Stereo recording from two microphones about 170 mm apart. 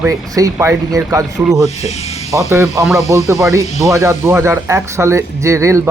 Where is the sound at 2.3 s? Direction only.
15° right (ahead or behind).